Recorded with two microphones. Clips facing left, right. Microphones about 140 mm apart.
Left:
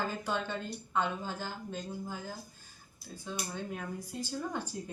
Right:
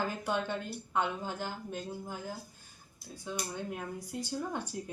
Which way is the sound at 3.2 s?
10° right (ahead or behind).